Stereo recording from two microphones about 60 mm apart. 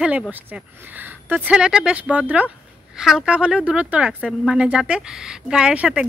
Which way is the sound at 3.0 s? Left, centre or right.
Centre.